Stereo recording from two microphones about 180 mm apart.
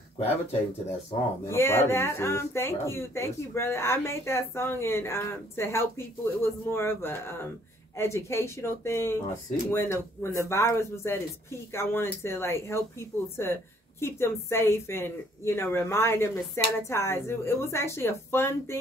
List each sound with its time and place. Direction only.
0.2 s speech: 35° left (ahead or behind)
1.5 s speech: 15° left (ahead or behind)